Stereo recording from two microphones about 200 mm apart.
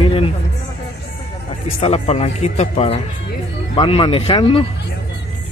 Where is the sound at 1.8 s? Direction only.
30° left (ahead or behind).